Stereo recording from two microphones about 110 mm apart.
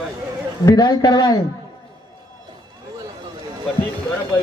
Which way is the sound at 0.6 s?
35° left (ahead or behind).